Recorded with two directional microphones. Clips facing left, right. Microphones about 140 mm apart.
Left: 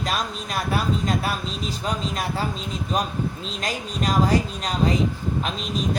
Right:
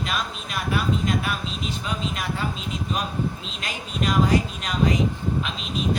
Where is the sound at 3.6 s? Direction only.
35° left (ahead or behind).